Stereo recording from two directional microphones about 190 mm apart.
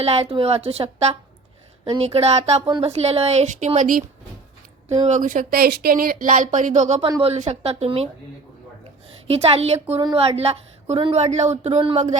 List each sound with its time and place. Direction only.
0.0 s a woman's voice: 30° right (ahead or behind)
9.2 s a woman's voice: 30° right (ahead or behind)